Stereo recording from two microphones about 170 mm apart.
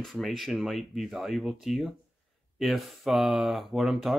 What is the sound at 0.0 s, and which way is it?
Speech, centre (ahead or behind).